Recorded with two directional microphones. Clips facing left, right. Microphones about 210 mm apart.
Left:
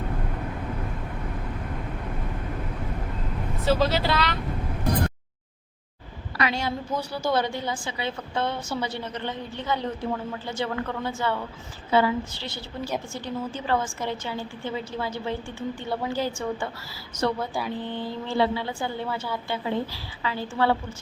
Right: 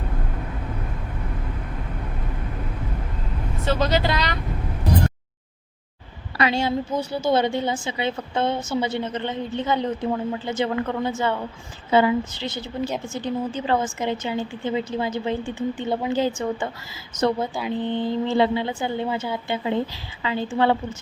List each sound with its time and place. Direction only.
3.7 s speech: 5° left (ahead or behind)
6.3 s a woman's voice: 25° right (ahead or behind)